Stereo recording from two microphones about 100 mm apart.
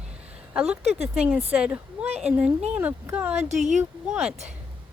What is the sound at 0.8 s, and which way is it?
Speech, 90° right.